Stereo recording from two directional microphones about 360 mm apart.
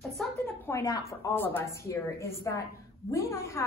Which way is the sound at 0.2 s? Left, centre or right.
Centre.